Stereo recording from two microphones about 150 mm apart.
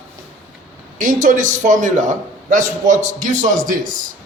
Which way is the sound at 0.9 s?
60° right (ahead or behind).